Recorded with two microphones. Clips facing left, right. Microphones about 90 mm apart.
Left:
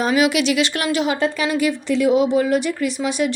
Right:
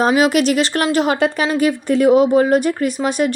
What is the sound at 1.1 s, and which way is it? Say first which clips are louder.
Speech: right 3 dB; 60° right (ahead or behind).